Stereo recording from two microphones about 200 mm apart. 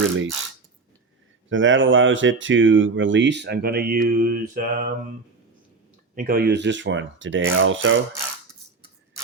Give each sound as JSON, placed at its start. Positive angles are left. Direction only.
{"t": 1.5, "sound": "speech", "side_deg": -70}
{"t": 6.1, "sound": "speech", "side_deg": -50}